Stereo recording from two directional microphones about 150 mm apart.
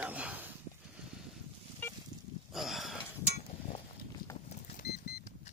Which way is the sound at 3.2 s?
45° left (ahead or behind).